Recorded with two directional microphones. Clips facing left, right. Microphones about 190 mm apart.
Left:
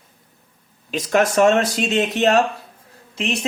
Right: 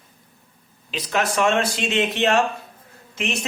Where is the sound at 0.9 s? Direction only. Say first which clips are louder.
Left 6 dB; 45° left (ahead or behind).